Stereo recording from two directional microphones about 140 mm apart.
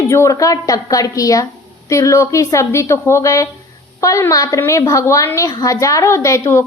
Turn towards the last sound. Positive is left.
turn(degrees=20)  # may be behind; listen again after turning